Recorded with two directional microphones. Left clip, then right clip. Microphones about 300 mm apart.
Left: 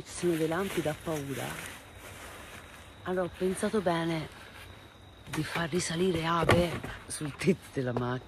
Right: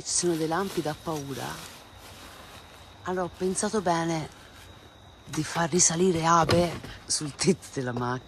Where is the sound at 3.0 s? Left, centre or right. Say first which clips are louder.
Right 2 dB; centre.